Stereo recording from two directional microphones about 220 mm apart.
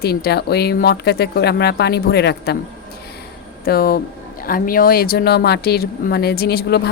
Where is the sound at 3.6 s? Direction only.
40° left (ahead or behind).